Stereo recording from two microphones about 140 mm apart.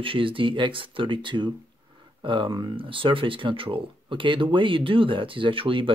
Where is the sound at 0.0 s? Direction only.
40° right (ahead or behind).